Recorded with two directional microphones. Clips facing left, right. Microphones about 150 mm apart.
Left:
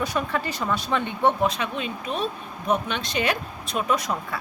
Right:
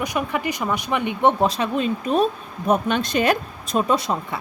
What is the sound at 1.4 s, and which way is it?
Speech, 35° right (ahead or behind).